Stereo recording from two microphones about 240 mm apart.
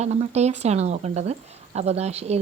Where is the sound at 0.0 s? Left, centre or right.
Right.